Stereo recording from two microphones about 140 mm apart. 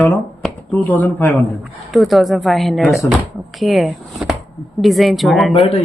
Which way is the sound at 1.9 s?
Centre (ahead or behind).